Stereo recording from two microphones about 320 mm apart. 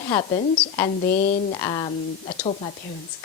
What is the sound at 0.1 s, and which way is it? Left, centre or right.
A woman's voice, centre.